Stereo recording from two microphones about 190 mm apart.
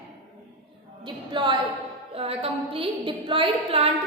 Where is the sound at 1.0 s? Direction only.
25° right (ahead or behind).